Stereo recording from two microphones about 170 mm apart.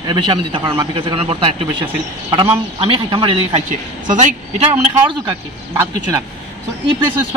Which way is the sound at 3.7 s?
50° right (ahead or behind).